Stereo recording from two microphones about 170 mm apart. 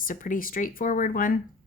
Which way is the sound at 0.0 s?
50° left (ahead or behind).